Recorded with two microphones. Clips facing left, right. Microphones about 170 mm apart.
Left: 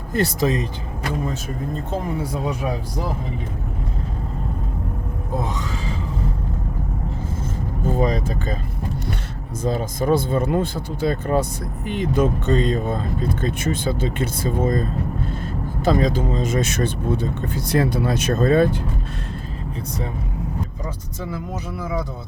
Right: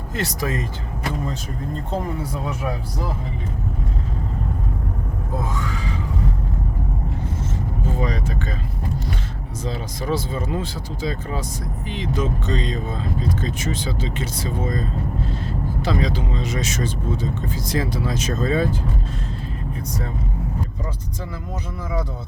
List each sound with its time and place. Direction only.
0.2 s speech: 25° left (ahead or behind)
5.4 s speech: 20° left (ahead or behind)
7.9 s speech: 40° left (ahead or behind)
9.6 s speech: 50° left (ahead or behind)